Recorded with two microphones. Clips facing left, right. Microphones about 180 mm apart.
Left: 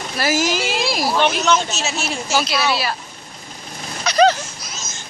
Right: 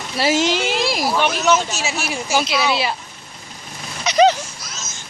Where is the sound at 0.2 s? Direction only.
25° right (ahead or behind).